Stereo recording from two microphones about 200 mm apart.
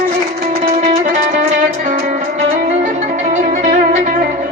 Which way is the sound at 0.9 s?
35° right (ahead or behind).